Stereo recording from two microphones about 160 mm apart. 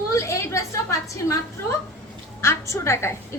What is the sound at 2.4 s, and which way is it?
Speech, 15° left (ahead or behind).